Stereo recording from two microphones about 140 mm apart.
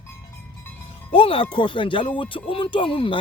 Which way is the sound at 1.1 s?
40° left (ahead or behind).